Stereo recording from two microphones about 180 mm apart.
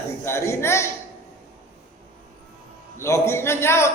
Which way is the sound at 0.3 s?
15° left (ahead or behind).